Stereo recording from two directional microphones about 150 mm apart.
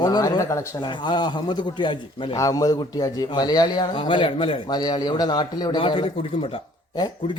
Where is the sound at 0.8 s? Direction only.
30° left (ahead or behind).